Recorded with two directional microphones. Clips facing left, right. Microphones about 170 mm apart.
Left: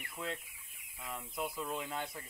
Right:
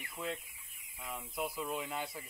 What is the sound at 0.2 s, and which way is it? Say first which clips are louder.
Speech: right 1 dB; centre (ahead or behind).